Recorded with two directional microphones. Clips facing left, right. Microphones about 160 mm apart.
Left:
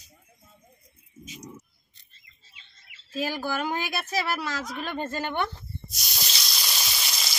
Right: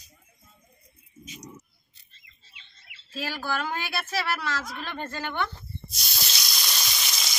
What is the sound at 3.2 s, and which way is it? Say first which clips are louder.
A woman's voice: left 2 dB; 15° left (ahead or behind).